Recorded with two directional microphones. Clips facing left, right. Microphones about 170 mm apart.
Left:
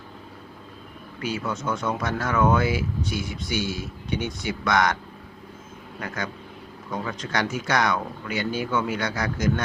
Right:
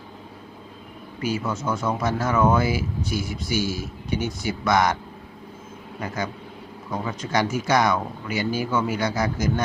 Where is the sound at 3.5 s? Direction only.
40° right (ahead or behind).